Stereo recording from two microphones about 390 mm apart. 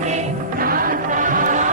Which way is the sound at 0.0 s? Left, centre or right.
Centre.